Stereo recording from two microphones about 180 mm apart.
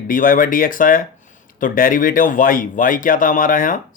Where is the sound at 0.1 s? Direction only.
50° left (ahead or behind).